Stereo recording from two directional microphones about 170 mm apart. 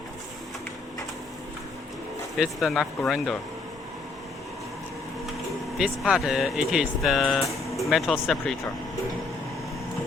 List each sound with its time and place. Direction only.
2.4 s speech: centre (ahead or behind)
5.7 s speech: 5° right (ahead or behind)